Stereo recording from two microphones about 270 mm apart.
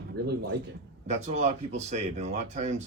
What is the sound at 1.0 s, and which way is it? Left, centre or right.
Speech, right.